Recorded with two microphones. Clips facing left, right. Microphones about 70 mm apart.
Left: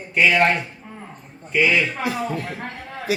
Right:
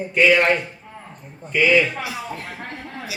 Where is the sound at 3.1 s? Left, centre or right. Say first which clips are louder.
Left 13 dB; left.